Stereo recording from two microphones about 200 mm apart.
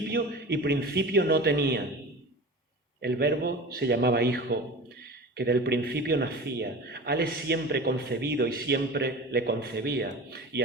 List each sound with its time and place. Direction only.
0.1 s a man's voice: 55° right (ahead or behind)
3.0 s a man's voice: 55° right (ahead or behind)